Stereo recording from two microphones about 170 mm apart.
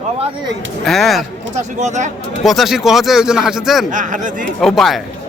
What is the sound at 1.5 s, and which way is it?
Speech, 45° right (ahead or behind).